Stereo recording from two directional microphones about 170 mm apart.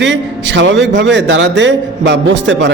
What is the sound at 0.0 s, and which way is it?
A man's voice, 90° right.